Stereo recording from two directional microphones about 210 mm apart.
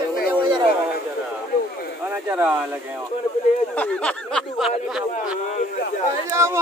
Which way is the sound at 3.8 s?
5° left (ahead or behind).